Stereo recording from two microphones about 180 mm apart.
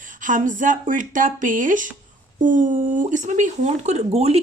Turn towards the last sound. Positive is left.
turn(degrees=-35)  # may be behind; listen again after turning